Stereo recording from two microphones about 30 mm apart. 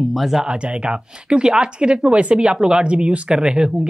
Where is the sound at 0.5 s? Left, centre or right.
Right.